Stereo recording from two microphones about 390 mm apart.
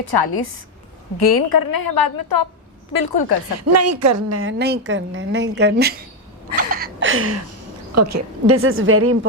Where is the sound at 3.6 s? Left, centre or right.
Right.